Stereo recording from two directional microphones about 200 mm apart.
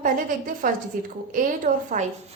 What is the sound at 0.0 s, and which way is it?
A woman's voice, 45° right (ahead or behind).